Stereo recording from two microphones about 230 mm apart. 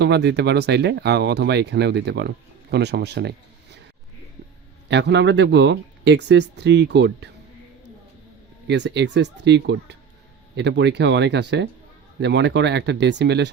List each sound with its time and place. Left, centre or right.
0.0 s speech: right
4.4 s a sound: right
4.9 s speech: right
8.6 s speech: right